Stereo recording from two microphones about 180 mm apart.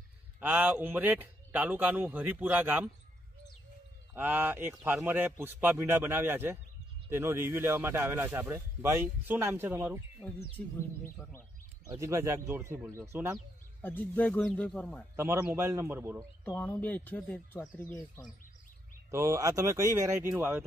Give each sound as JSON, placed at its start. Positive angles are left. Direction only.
{"t": 0.4, "sound": "speech", "side_deg": -10}
{"t": 4.1, "sound": "speech", "side_deg": -10}
{"t": 10.2, "sound": "speech", "side_deg": 5}
{"t": 11.1, "sound": "bird", "side_deg": 15}
{"t": 11.9, "sound": "speech", "side_deg": -15}
{"t": 13.7, "sound": "speech", "side_deg": 10}
{"t": 15.1, "sound": "speech", "side_deg": -15}
{"t": 16.2, "sound": "speech", "side_deg": 10}
{"t": 19.0, "sound": "speech", "side_deg": -15}